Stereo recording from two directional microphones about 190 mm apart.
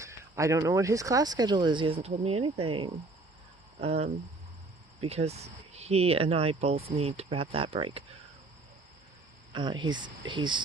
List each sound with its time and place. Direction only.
0.0 s speech: 15° right (ahead or behind)
9.5 s speech: 25° right (ahead or behind)